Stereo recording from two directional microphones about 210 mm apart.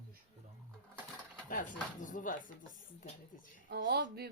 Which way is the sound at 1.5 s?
40° left (ahead or behind).